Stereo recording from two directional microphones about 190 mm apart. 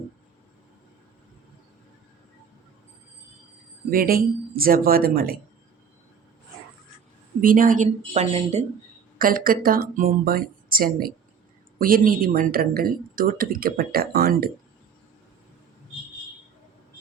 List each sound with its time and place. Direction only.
3.8 s speech: 50° right (ahead or behind)
7.4 s speech: 45° right (ahead or behind)
9.1 s speech: 50° right (ahead or behind)